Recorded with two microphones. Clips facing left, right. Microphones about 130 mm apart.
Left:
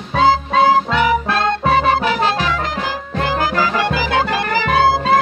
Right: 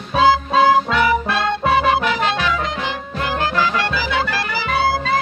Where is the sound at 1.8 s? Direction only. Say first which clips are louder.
Left 2 dB; 35° left (ahead or behind).